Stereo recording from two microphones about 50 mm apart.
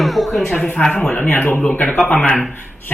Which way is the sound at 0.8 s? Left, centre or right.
Left.